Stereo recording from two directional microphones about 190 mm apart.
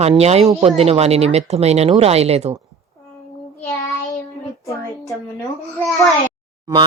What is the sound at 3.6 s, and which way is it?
Child singing, 10° left (ahead or behind).